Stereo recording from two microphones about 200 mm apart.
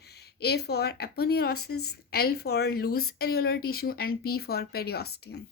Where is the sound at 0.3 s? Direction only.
55° left (ahead or behind).